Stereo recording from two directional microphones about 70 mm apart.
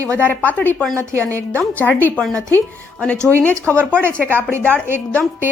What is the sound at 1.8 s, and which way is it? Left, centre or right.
Speech, left.